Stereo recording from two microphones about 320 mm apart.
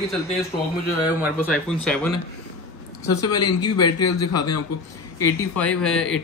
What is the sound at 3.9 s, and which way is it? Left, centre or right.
Speech, left.